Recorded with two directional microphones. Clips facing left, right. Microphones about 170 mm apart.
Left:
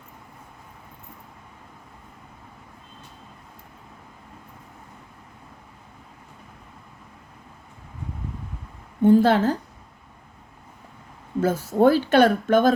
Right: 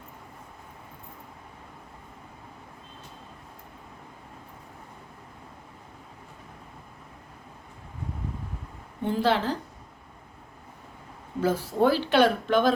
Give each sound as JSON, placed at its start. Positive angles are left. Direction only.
{"t": 9.0, "sound": "a woman's voice", "side_deg": 45}
{"t": 11.3, "sound": "speech", "side_deg": 45}